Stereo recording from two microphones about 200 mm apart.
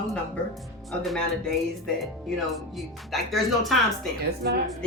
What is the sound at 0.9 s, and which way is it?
Speech, centre (ahead or behind).